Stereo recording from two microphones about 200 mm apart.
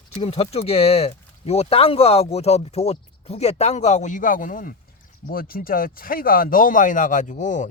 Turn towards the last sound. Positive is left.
turn(degrees=40)  # may be behind; listen again after turning